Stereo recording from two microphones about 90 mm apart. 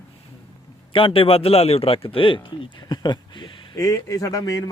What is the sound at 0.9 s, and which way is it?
Speech, 80° left.